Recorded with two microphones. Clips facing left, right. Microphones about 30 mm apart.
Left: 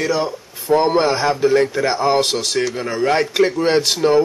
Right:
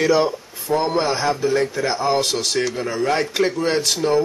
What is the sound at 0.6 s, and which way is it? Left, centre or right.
A man's voice, centre.